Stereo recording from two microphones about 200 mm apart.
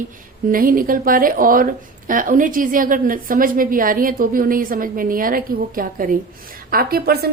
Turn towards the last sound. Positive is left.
turn(degrees=-50)  # may be behind; listen again after turning